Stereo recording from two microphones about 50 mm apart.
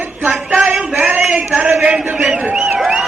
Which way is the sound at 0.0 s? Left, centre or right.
Right.